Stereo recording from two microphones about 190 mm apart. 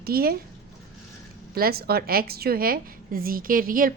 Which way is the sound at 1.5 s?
55° right (ahead or behind).